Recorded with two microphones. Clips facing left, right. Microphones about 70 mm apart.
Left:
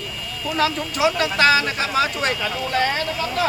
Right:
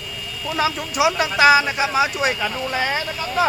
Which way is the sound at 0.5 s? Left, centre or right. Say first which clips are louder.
Even; centre.